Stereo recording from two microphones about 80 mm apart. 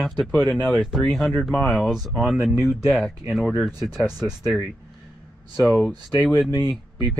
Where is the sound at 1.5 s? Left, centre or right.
Centre.